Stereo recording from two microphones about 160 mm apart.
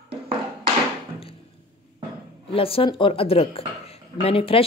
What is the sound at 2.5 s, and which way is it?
A woman's voice, 35° left (ahead or behind).